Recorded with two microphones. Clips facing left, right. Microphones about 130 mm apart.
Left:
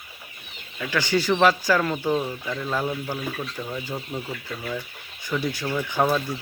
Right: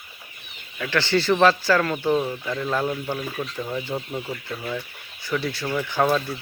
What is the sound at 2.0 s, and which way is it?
Speech, 5° right (ahead or behind).